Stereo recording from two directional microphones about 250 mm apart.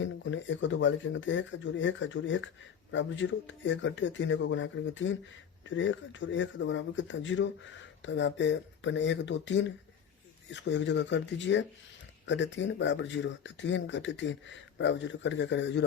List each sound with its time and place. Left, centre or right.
0.0 s speech: left